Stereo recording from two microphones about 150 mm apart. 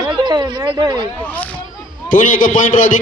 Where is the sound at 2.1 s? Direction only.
60° left (ahead or behind).